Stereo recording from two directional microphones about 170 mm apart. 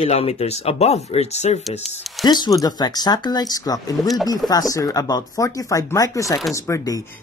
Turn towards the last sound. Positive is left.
turn(degrees=20)  # may be behind; listen again after turning